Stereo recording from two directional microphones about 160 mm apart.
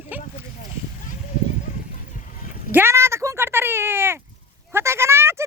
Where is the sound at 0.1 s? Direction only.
10° right (ahead or behind).